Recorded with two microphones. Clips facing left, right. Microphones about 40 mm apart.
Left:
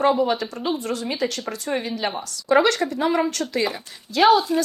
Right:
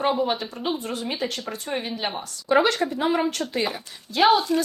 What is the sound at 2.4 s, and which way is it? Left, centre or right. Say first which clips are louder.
Speech: left 2 dB; left.